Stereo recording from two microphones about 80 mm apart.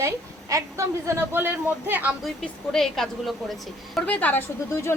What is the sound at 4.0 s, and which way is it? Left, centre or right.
Speech, centre.